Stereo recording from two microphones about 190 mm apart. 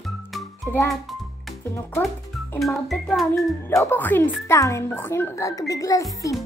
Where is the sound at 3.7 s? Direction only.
10° left (ahead or behind).